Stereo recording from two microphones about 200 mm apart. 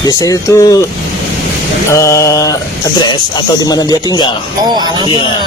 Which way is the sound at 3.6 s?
20° left (ahead or behind).